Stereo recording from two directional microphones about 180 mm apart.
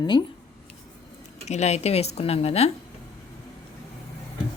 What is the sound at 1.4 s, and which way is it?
A woman's voice, 40° left (ahead or behind).